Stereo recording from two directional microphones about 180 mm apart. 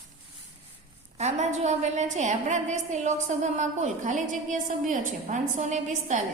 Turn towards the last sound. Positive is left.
turn(degrees=-40)  # may be behind; listen again after turning